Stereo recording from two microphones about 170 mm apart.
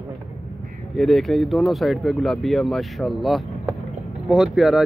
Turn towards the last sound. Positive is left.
turn(degrees=0)  # may be behind; listen again after turning